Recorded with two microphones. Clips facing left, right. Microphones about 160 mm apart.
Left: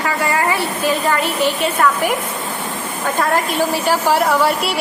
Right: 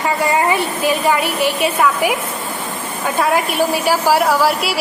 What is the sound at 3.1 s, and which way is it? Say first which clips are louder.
A woman's voice: right 2 dB; 10° right (ahead or behind).